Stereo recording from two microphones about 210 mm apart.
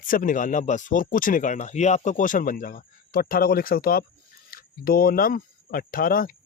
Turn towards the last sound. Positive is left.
turn(degrees=45)  # may be behind; listen again after turning